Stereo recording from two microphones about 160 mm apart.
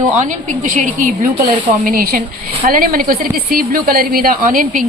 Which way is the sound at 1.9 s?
65° right (ahead or behind).